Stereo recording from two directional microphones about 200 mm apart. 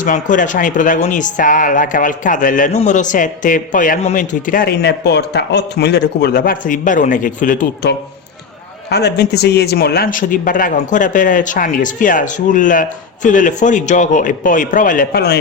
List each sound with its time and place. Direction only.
0.0 s speech: 40° left (ahead or behind)
8.9 s speech: 55° left (ahead or behind)